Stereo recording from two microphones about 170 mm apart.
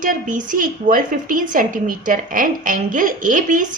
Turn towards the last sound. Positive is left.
turn(degrees=-50)  # may be behind; listen again after turning